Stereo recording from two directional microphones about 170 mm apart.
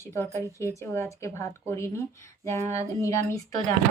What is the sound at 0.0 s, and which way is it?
Speech, 15° left (ahead or behind).